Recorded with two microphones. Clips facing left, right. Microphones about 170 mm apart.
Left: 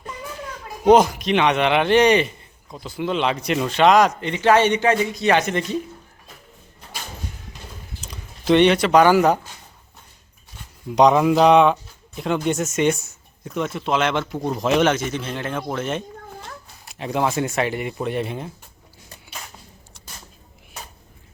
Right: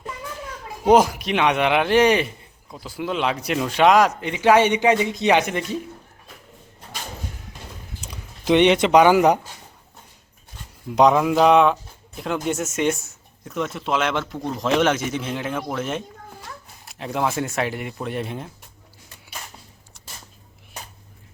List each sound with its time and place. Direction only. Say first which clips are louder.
0.9 s speech: left 2 dB; 10° right (ahead or behind)
8.0 s speech: left 2 dB; 10° right (ahead or behind)
10.9 s speech: left 1 dB; centre (ahead or behind)
14.3 s a man's voice: left 2 dB; 10° left (ahead or behind)
14.9 s speech: even; 10° right (ahead or behind)